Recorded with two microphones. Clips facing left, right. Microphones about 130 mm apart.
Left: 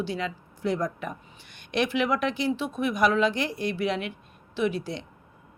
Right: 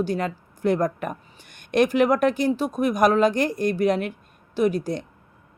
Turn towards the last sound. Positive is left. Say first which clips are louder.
# right 5 dB
turn(degrees=-45)  # may be behind; listen again after turning